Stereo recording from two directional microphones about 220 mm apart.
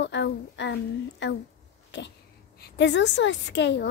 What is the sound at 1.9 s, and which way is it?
Cat, 55° left (ahead or behind).